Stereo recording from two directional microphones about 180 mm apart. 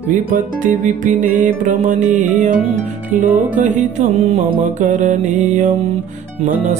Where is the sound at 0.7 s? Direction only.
50° right (ahead or behind).